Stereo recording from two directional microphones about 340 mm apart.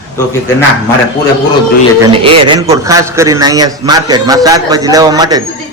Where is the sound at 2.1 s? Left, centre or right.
Centre.